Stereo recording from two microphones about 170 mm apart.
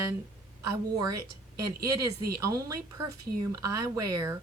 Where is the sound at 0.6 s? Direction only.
20° right (ahead or behind).